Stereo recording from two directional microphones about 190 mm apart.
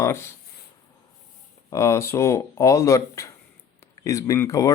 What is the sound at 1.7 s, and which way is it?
Speech, 15° left (ahead or behind).